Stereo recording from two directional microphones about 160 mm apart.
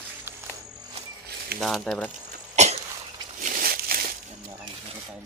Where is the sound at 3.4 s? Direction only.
65° right (ahead or behind).